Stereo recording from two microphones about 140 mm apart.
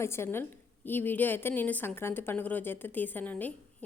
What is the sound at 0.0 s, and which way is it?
A woman's voice, 20° left (ahead or behind).